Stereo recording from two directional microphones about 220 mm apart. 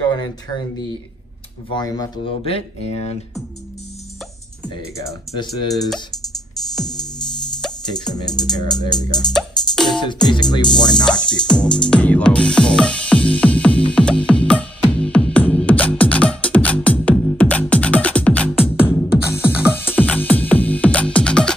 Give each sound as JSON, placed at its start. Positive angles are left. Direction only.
{"t": 0.1, "sound": "speech", "side_deg": 20}
{"t": 4.9, "sound": "speech", "side_deg": 15}
{"t": 8.1, "sound": "speech", "side_deg": 20}
{"t": 9.3, "sound": "music", "side_deg": 0}
{"t": 10.2, "sound": "speech", "side_deg": 20}
{"t": 11.2, "sound": "music", "side_deg": 5}
{"t": 19.4, "sound": "music", "side_deg": -5}
{"t": 19.7, "sound": "music", "side_deg": 10}